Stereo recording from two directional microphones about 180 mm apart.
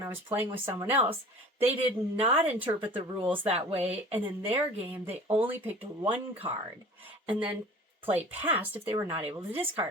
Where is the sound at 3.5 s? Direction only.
35° right (ahead or behind).